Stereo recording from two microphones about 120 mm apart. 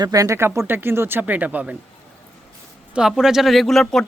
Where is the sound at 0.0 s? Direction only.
30° right (ahead or behind); by 1.7 s 10° right (ahead or behind).